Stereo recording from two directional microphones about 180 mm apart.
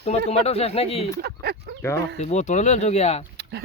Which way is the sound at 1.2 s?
60° right (ahead or behind).